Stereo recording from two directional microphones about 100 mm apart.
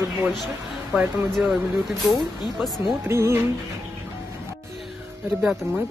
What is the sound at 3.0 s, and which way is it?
Speech, 25° right (ahead or behind).